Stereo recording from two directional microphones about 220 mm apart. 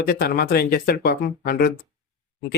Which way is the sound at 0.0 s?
45° left (ahead or behind).